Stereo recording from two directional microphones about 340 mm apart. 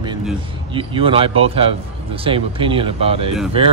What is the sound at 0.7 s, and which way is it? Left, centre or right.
A man's voice, centre.